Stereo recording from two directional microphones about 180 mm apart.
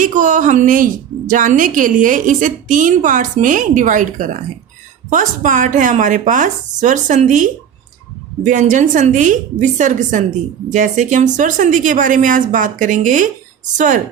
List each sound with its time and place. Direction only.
0.0 s a woman's voice: 45° right (ahead or behind)